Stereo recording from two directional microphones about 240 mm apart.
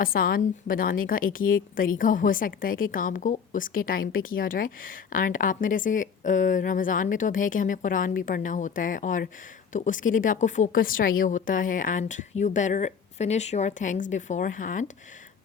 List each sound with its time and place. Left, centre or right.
0.0 s a woman's voice: left